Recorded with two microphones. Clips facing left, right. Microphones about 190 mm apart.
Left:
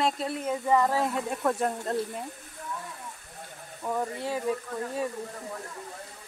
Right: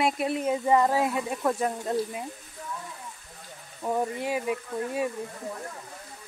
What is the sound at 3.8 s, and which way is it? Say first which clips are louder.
Speech: right 3 dB; 20° right (ahead or behind).